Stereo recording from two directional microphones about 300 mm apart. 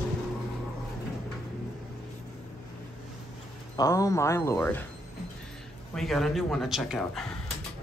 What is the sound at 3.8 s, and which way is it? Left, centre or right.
Speech, centre.